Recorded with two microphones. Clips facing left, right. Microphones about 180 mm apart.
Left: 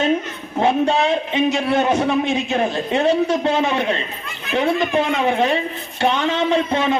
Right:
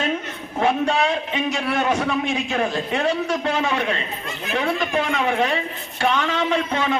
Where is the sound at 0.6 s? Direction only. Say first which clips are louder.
Left 3 dB; 25° left (ahead or behind).